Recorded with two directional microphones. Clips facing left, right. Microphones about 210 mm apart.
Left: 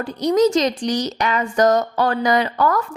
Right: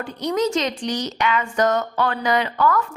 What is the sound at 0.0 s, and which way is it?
A woman's voice, 40° left (ahead or behind).